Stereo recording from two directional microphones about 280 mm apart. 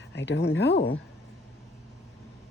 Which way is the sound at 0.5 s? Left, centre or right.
Left.